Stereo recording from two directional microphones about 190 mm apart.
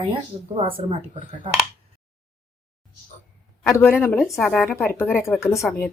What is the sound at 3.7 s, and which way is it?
A woman's voice, 10° left (ahead or behind).